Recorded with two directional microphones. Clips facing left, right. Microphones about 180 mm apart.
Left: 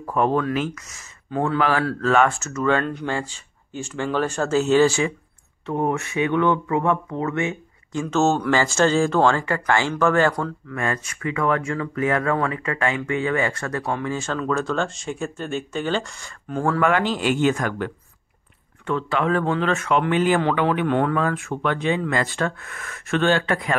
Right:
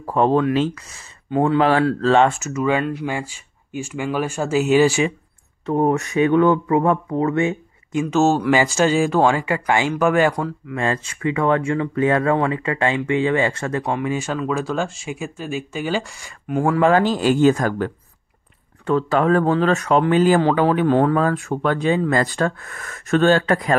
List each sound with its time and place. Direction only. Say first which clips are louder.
0.0 s speech: right 4 dB; 30° right (ahead or behind)
5.7 s speech: right 5 dB; 40° right (ahead or behind)
7.9 s speech: right 3 dB; 15° right (ahead or behind)
10.8 s speech: right 4 dB; 25° right (ahead or behind)
16.8 s speech: right 5 dB; 40° right (ahead or behind)